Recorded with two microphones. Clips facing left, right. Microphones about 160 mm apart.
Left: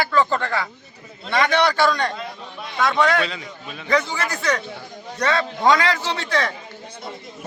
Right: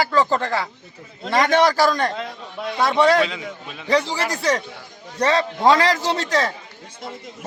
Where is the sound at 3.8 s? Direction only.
30° right (ahead or behind).